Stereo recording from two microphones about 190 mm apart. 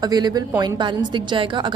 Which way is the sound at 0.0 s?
20° right (ahead or behind).